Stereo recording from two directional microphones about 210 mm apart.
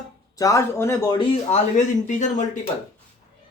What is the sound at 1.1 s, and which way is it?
Speech, 35° left (ahead or behind).